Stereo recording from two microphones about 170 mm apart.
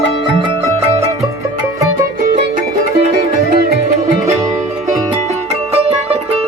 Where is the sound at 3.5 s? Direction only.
70° right (ahead or behind).